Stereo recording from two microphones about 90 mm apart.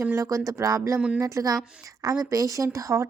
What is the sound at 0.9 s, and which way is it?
Speech, 10° right (ahead or behind).